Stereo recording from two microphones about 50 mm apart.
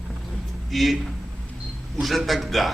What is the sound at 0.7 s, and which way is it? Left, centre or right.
Speech, centre.